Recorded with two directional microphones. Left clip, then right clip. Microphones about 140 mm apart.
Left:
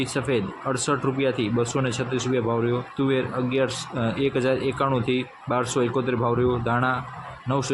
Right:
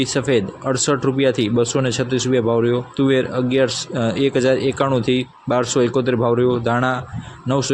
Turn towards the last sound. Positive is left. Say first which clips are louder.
# right 6 dB
turn(degrees=-30)  # may be behind; listen again after turning